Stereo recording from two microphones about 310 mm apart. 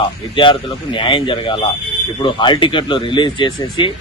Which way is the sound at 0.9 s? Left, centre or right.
Centre.